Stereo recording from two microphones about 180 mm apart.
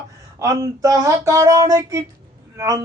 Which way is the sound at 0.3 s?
20° right (ahead or behind).